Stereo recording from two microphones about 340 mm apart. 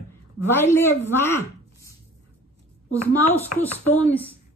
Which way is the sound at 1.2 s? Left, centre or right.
Centre.